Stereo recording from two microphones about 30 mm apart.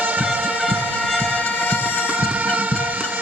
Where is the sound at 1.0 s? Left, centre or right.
Right.